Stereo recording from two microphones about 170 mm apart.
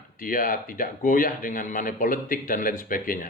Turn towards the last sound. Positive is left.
turn(degrees=55)  # may be behind; listen again after turning